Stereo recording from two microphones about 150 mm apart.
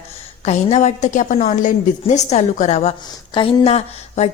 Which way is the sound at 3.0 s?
35° left (ahead or behind).